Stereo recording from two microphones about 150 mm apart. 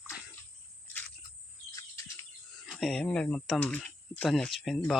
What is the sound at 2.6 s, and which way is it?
Speech, centre (ahead or behind).